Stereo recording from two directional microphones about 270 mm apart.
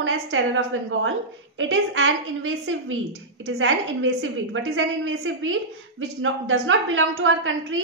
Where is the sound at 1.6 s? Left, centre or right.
Right.